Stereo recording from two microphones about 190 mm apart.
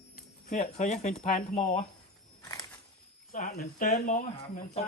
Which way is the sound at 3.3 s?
45° left (ahead or behind).